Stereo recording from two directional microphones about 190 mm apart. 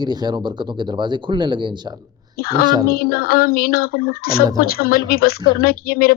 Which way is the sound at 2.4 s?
50° left (ahead or behind).